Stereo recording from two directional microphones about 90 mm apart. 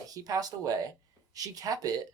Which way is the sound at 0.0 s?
40° right (ahead or behind).